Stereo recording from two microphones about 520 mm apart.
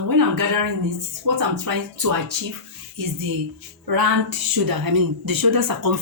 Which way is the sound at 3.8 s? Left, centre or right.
Right.